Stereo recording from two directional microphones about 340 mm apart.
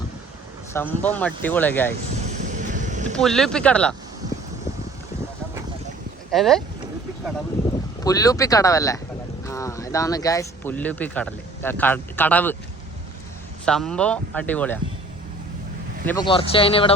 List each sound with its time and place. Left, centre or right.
0.7 s speech: centre
2.1 s a sound: right
3.2 s speech: centre
6.3 s speech: centre
8.0 s speech: centre
13.7 s speech: centre
16.0 s speech: centre